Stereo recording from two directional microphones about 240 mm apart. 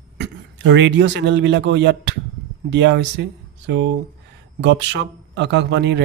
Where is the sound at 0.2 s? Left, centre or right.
Right.